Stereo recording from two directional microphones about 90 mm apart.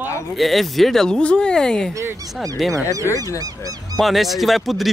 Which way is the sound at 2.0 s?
35° right (ahead or behind).